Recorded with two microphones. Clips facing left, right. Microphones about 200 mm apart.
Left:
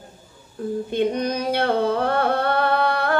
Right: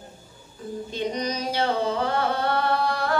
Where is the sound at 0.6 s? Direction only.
55° left (ahead or behind).